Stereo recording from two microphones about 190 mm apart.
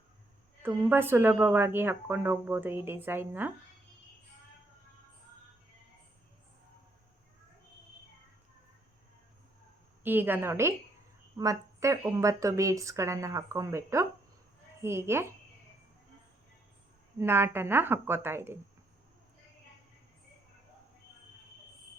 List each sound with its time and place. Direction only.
0.6 s speech: 10° right (ahead or behind)
10.0 s speech: 10° right (ahead or behind)
17.2 s speech: 10° right (ahead or behind)